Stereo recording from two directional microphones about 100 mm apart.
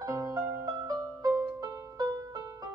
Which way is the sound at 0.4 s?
20° right (ahead or behind).